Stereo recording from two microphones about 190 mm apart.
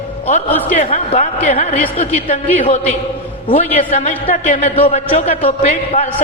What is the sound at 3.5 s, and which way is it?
A man's voice, 40° left (ahead or behind).